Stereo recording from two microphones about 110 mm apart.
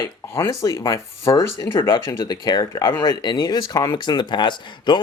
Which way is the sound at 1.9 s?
40° left (ahead or behind).